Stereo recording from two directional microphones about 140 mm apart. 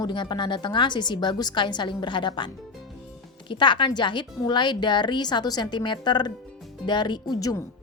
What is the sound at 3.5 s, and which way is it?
A woman's voice, 35° left (ahead or behind).